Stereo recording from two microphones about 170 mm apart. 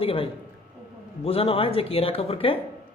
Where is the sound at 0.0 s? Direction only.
35° left (ahead or behind).